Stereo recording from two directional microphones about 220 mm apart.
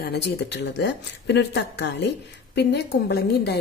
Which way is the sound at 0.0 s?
50° left (ahead or behind).